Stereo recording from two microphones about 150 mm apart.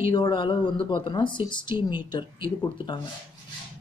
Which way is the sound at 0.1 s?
30° left (ahead or behind).